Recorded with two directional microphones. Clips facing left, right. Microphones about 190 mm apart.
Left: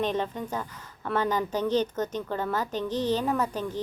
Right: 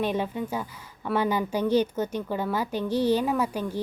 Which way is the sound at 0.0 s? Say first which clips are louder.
Right 1 dB; 10° right (ahead or behind).